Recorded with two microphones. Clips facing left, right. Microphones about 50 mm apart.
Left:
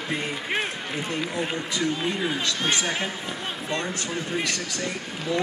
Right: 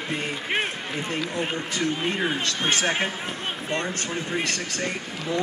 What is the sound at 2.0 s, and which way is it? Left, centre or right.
Speech, right.